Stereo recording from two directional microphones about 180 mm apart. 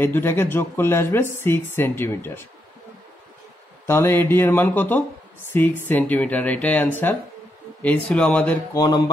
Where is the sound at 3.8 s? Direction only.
15° left (ahead or behind).